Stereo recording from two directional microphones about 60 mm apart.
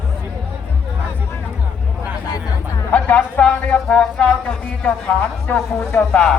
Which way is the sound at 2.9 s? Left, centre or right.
Left.